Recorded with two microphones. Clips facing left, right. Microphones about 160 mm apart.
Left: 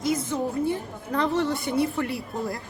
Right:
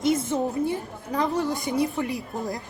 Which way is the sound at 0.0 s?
25° right (ahead or behind).